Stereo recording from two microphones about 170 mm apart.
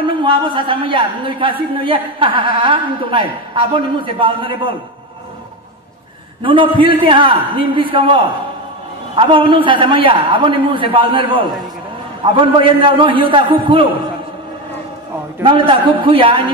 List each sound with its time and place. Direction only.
0.0 s a man's voice: 30° right (ahead or behind)
6.4 s a woman's voice: 30° right (ahead or behind)
15.4 s a man's voice: 30° right (ahead or behind)